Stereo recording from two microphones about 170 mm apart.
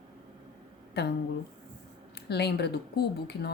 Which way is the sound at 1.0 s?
75° left (ahead or behind).